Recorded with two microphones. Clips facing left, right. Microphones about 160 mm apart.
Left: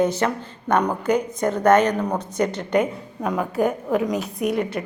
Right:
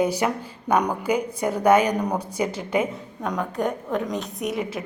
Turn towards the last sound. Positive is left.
turn(degrees=0)  # may be behind; listen again after turning